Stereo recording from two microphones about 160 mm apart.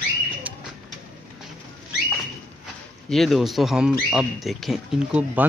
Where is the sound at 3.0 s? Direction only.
Centre (ahead or behind).